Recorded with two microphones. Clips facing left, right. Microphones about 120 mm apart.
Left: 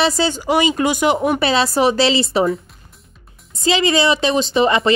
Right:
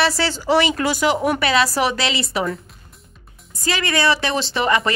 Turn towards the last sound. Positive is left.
turn(degrees=25)  # may be behind; listen again after turning